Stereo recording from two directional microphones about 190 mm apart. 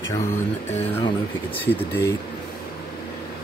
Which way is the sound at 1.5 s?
10° left (ahead or behind).